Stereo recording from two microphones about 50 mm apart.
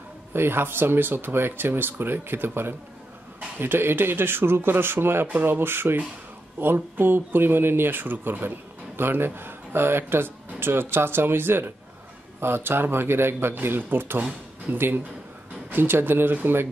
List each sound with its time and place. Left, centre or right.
0.3 s speech: right